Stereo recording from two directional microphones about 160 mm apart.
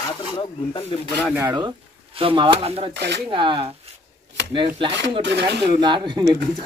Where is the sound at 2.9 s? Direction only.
90° right.